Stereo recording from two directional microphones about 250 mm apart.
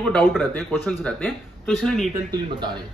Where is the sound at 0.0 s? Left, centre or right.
Centre.